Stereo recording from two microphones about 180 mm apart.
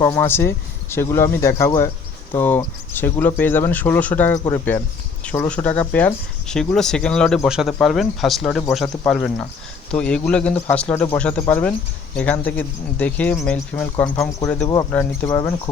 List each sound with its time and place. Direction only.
0.0 s speech: 15° left (ahead or behind)